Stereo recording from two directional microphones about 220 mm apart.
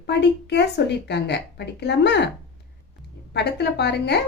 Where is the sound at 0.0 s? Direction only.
50° left (ahead or behind).